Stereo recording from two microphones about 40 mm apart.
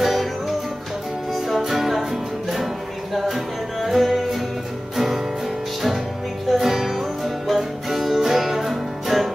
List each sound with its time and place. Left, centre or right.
0.0 s music: centre
1.3 s music: centre
3.3 s music: centre
6.5 s music: centre